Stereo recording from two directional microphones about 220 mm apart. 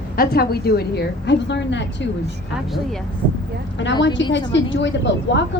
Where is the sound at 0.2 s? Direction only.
45° left (ahead or behind).